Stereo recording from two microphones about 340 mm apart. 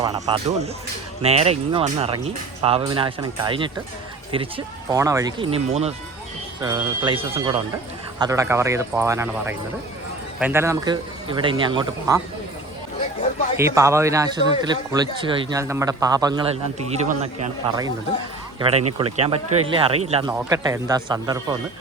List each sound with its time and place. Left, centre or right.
0.0 s speech: centre
13.6 s a man's voice: centre
18.9 s speech: centre